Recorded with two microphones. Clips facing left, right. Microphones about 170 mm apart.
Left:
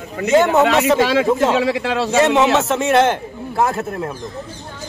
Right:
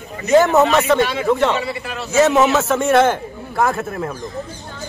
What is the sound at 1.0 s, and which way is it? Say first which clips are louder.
A man's voice: left 2 dB; 90° left.